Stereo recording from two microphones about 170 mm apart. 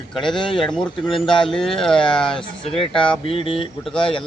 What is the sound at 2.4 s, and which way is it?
Speech, 30° left (ahead or behind).